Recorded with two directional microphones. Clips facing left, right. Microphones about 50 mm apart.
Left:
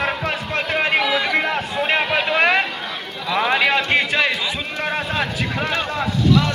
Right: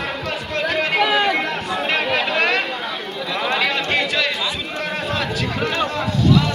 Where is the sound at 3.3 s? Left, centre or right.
Centre.